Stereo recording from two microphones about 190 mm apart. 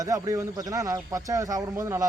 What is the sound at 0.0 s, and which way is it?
Speech, 15° right (ahead or behind).